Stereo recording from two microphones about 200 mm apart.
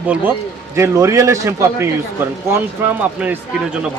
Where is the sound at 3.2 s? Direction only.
5° right (ahead or behind).